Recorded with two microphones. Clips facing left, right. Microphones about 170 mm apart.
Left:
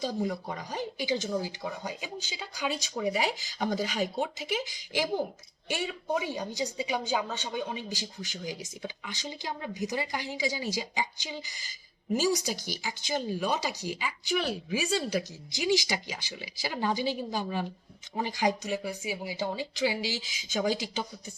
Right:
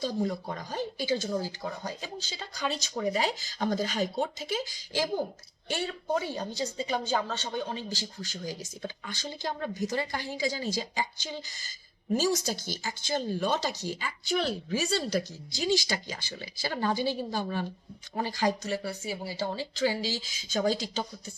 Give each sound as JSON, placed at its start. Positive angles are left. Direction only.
{"t": 0.0, "sound": "speech", "side_deg": 10}